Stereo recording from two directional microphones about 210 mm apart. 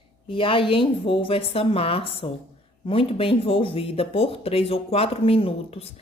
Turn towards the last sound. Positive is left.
turn(degrees=30)  # may be behind; listen again after turning